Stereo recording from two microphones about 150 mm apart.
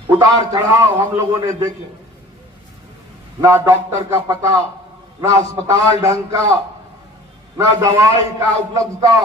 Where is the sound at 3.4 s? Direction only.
20° right (ahead or behind).